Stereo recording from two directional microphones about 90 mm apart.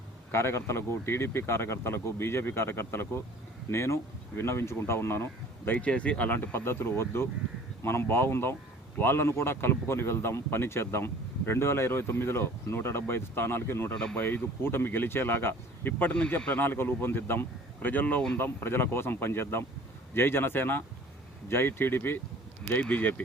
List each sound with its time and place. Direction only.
0.3 s speech: 30° left (ahead or behind)
13.9 s speech: 10° left (ahead or behind)
14.2 s speech: 20° left (ahead or behind)
18.3 s speech: 25° left (ahead or behind)